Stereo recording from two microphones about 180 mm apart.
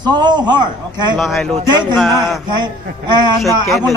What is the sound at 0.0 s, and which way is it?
A man's voice, 25° right (ahead or behind).